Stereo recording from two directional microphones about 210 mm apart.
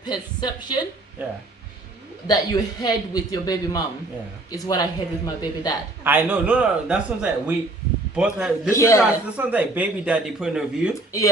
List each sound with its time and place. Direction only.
0.0 s a woman's voice: 20° left (ahead or behind)
2.2 s a man's voice: 20° left (ahead or behind)
6.0 s a man's voice: 10° right (ahead or behind)
8.7 s a man's voice: 15° left (ahead or behind)
9.0 s speech: 5° right (ahead or behind)